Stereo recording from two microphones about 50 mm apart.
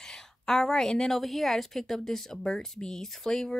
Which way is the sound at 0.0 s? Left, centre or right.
Centre.